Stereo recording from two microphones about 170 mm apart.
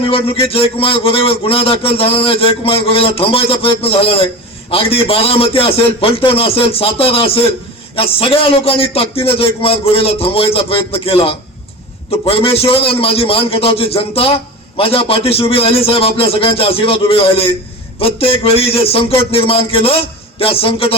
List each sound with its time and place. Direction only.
0.0 s a man's voice: 35° left (ahead or behind)